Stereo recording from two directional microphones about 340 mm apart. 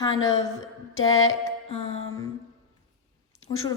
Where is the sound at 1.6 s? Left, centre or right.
Centre.